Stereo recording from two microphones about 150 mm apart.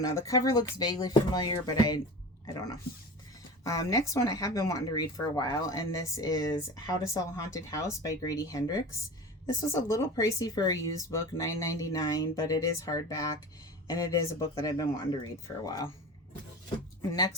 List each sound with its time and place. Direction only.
0.0 s speech: 20° left (ahead or behind)
3.6 s speech: 20° left (ahead or behind)
17.0 s speech: 20° left (ahead or behind)